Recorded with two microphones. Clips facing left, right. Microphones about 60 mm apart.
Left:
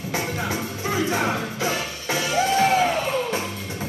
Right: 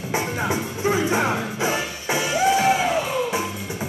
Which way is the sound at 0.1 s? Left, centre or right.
Right.